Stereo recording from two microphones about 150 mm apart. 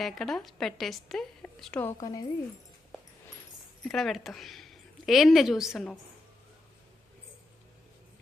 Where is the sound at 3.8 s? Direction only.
Centre (ahead or behind).